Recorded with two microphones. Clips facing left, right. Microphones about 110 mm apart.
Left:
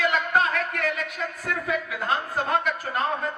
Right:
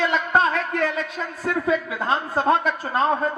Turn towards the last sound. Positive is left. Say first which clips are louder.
# right 4 dB
turn(degrees=-30)  # may be behind; listen again after turning